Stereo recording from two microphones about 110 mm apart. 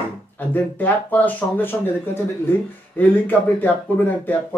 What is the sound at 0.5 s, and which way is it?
Speech, 15° left (ahead or behind).